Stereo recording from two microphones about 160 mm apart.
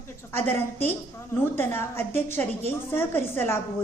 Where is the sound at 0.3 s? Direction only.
15° left (ahead or behind).